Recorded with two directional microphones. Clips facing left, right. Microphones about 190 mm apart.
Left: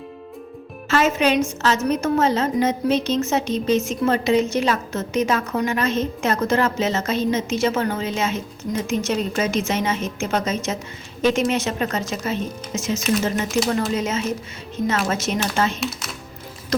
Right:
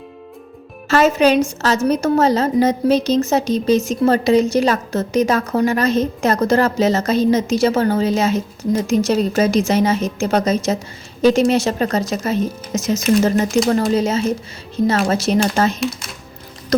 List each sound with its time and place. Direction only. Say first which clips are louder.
0.9 s a woman's voice: right 5 dB; 35° right (ahead or behind)
15.8 s speech: right 5 dB; centre (ahead or behind)